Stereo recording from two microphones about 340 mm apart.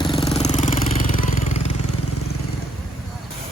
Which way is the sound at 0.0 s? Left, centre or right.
Centre.